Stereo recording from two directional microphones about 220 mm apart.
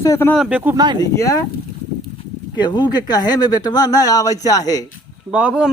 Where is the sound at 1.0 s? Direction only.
15° left (ahead or behind).